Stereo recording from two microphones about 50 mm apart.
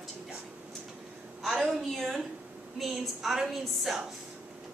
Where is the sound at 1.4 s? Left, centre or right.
Centre.